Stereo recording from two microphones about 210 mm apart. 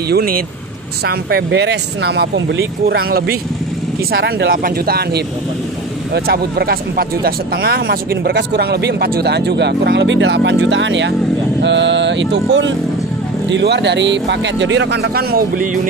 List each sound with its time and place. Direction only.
0.1 s speech: 45° right (ahead or behind)